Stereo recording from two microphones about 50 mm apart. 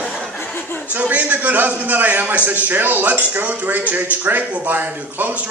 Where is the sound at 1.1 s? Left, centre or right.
Right.